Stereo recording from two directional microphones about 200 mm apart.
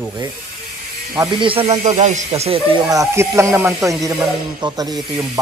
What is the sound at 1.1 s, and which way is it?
Speech, 25° right (ahead or behind).